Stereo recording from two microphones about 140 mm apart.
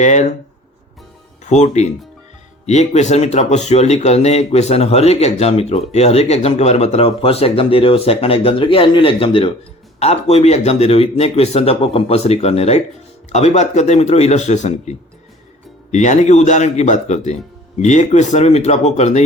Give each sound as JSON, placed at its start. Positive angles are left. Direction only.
{"t": 0.0, "sound": "a man's voice", "side_deg": 55}
{"t": 1.5, "sound": "a man's voice", "side_deg": 55}